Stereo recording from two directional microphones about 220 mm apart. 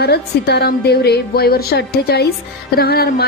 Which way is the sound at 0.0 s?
45° left (ahead or behind).